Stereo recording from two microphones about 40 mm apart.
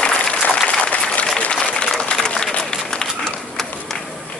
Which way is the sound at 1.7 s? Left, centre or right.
Centre.